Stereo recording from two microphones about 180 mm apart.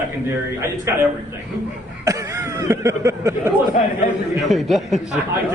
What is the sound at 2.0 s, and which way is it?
Speech, 15° right (ahead or behind).